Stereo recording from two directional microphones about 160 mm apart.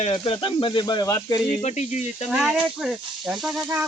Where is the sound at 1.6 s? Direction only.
45° left (ahead or behind).